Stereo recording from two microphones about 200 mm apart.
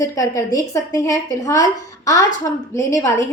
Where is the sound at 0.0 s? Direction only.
15° left (ahead or behind).